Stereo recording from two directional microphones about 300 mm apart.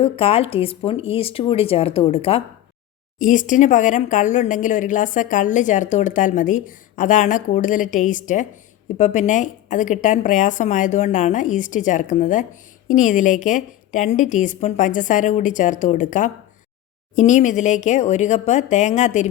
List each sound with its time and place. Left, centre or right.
0.0 s speech: centre